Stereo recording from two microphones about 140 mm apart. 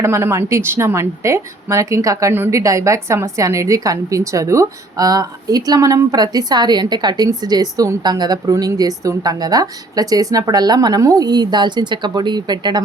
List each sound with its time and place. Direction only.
0.0 s a woman's voice: 20° right (ahead or behind)